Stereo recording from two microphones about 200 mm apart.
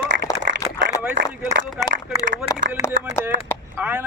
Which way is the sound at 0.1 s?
60° right (ahead or behind).